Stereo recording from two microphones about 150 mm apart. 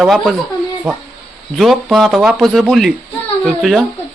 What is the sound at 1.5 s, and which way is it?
Speech, centre (ahead or behind).